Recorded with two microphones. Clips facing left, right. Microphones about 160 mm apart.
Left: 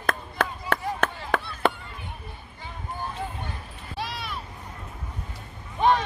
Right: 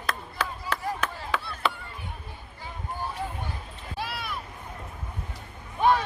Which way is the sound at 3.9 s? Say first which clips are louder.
Left 1 dB; 10° right (ahead or behind).